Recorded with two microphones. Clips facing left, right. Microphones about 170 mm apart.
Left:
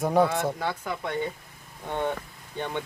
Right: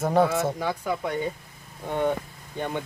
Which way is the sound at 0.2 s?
5° right (ahead or behind).